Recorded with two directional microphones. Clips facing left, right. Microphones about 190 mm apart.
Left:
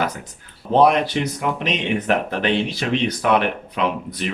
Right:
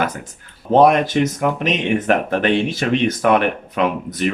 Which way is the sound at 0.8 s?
45° right (ahead or behind).